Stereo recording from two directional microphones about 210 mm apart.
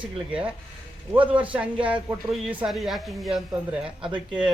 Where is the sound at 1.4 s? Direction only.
5° right (ahead or behind).